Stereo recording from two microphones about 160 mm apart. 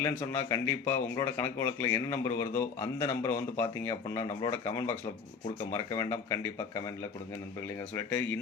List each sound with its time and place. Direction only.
0.0 s speech: 20° left (ahead or behind)
5.7 s speech: 20° left (ahead or behind)